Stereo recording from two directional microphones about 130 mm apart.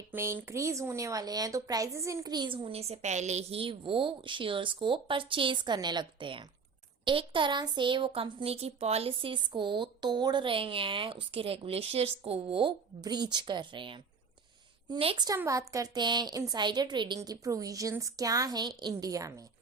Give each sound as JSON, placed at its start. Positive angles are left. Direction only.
{"t": 0.1, "sound": "a woman's voice", "side_deg": -15}
{"t": 15.4, "sound": "speech", "side_deg": -25}
{"t": 17.2, "sound": "a woman's voice", "side_deg": -25}